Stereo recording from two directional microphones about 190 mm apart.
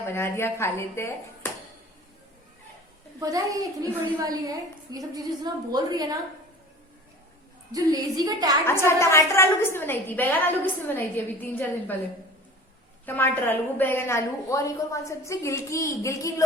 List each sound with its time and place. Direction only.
0.0 s a woman's voice: 10° left (ahead or behind)
3.2 s a woman's voice: 20° right (ahead or behind)
7.7 s a woman's voice: 20° right (ahead or behind)
8.6 s a woman's voice: 15° left (ahead or behind)
13.1 s a woman's voice: 10° left (ahead or behind)